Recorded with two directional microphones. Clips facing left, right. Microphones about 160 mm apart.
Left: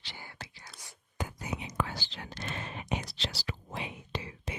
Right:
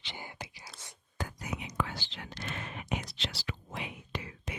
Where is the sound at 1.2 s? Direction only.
30° left (ahead or behind).